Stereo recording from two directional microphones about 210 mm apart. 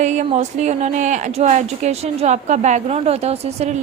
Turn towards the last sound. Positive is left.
turn(degrees=-30)  # may be behind; listen again after turning